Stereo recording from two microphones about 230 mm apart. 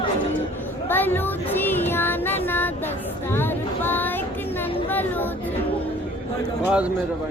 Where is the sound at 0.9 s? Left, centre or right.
Centre.